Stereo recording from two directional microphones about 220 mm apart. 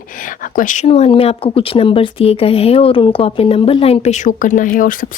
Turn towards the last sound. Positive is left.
turn(degrees=40)  # may be behind; listen again after turning